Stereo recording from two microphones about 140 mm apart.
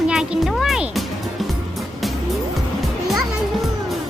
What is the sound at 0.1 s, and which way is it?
Music, 5° right (ahead or behind).